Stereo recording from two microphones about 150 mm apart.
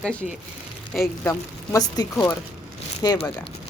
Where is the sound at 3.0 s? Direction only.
25° left (ahead or behind).